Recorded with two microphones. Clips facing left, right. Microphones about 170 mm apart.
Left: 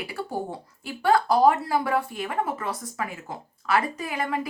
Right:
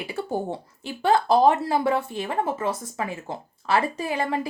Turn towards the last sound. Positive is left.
turn(degrees=-30)  # may be behind; listen again after turning